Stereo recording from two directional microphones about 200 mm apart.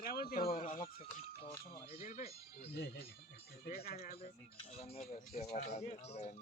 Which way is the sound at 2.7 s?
55° left (ahead or behind).